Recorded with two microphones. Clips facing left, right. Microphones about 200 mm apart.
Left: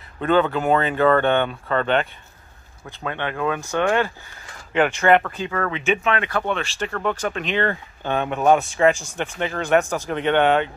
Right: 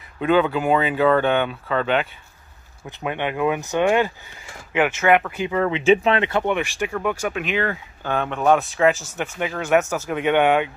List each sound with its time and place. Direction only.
0.2 s speech: 10° right (ahead or behind)
2.9 s speech: 15° right (ahead or behind)
8.2 s speech: 10° left (ahead or behind); by 10.7 s 10° right (ahead or behind)